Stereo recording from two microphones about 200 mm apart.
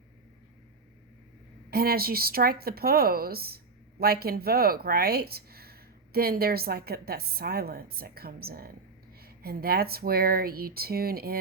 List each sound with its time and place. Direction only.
1.7 s speech: 50° right (ahead or behind)